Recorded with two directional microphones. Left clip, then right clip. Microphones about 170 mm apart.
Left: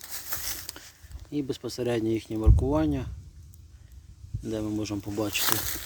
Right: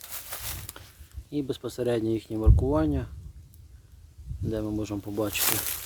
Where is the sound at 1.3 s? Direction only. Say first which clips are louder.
Even; 5° right (ahead or behind).